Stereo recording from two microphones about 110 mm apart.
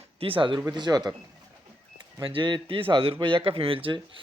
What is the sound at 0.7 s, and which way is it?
Speech, 40° right (ahead or behind).